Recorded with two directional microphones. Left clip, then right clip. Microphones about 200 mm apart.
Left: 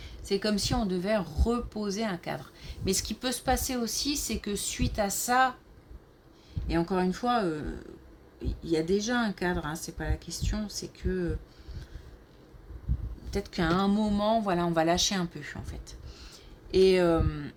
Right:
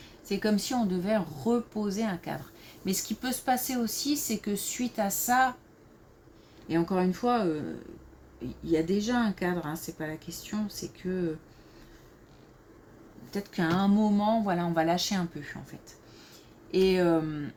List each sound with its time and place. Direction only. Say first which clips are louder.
0.3 s speech: left 1 dB; 40° left (ahead or behind)
6.7 s speech: right 1 dB; 40° left (ahead or behind)
13.3 s speech: left 1 dB; 40° left (ahead or behind)
16.7 s speech: left 2 dB; 40° left (ahead or behind)